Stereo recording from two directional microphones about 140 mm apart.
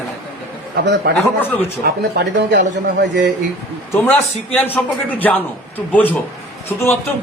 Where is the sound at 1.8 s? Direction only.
90° right.